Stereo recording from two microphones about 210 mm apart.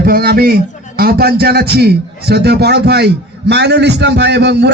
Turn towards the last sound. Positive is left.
turn(degrees=-55)  # may be behind; listen again after turning